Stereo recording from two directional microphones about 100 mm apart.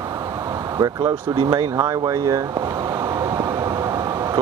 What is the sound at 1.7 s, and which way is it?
Speech, 40° right (ahead or behind).